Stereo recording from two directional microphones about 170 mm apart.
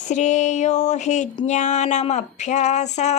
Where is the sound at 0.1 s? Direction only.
45° left (ahead or behind).